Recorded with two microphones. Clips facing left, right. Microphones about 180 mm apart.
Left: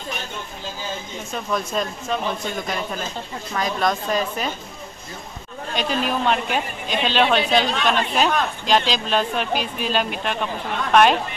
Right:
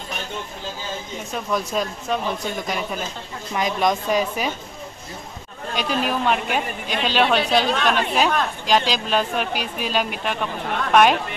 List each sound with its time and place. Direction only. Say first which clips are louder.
1.7 s speech: right 1 dB; centre (ahead or behind)
5.8 s speech: even; 10° right (ahead or behind)